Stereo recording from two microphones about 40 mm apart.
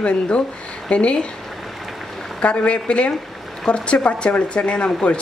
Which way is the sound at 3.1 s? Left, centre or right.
Centre.